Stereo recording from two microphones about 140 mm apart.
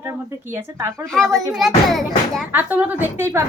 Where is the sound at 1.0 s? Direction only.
5° left (ahead or behind).